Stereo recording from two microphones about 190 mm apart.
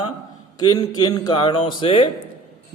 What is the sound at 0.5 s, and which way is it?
A man's voice, 20° left (ahead or behind).